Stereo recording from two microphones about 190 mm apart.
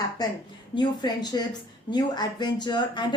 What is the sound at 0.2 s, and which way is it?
A woman's voice, 20° left (ahead or behind).